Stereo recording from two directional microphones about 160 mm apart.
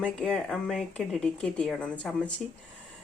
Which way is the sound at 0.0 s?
5° left (ahead or behind).